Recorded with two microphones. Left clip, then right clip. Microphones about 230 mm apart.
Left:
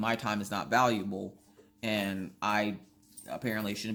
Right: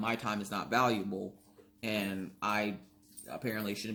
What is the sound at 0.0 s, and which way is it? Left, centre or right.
Speech, left.